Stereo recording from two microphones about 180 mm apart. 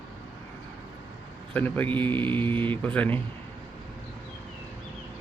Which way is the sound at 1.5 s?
10° left (ahead or behind).